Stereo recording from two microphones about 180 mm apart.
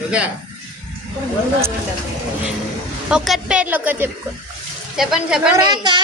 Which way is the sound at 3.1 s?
5° right (ahead or behind).